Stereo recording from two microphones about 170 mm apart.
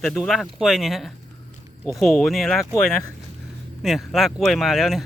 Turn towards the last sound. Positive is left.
turn(degrees=0)  # may be behind; listen again after turning